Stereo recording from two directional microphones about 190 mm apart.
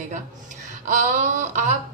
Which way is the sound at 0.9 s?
40° right (ahead or behind).